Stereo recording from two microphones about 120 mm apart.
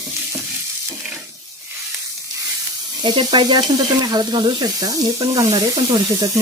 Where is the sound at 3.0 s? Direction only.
40° right (ahead or behind).